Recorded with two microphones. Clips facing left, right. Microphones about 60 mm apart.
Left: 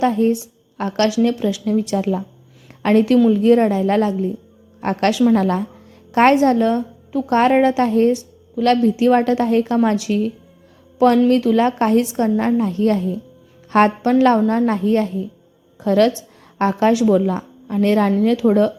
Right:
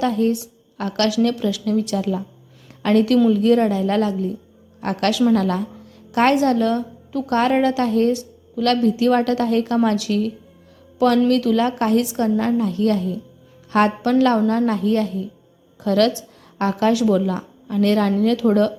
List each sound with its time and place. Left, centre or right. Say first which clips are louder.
0.0 s a woman's voice: left 3 dB; left
14.7 s a woman's voice: left 2 dB; left